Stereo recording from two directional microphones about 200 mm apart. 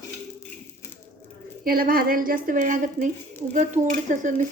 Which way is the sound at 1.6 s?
45° right (ahead or behind).